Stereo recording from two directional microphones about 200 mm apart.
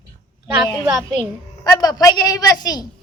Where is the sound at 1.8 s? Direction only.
20° left (ahead or behind).